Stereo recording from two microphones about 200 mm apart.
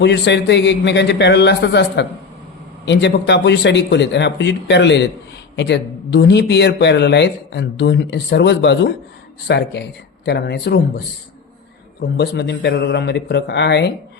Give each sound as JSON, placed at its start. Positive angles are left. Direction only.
{"t": 0.0, "sound": "speech", "side_deg": 60}
{"t": 12.1, "sound": "speech", "side_deg": 55}